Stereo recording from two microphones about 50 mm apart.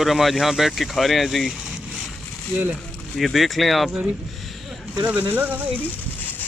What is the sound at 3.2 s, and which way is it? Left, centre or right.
Speech, centre.